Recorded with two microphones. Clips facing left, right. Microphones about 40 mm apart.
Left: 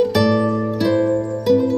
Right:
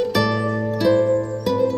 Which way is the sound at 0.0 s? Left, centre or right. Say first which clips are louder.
Left 4 dB; centre.